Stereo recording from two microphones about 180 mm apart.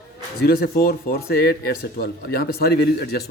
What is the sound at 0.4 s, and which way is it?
Speech, 60° left (ahead or behind).